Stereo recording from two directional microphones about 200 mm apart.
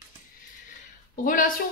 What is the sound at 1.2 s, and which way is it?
Speech, 40° left (ahead or behind).